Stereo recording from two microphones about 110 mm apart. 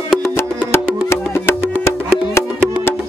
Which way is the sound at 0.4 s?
25° left (ahead or behind).